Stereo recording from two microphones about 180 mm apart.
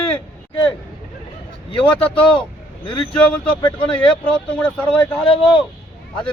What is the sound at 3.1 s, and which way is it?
A man's voice, 10° left (ahead or behind).